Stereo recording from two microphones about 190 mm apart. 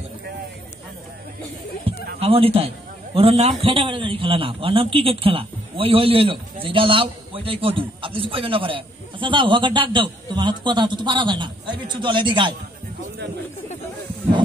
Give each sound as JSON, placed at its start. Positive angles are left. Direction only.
{"t": 2.1, "sound": "a man's voice", "side_deg": -30}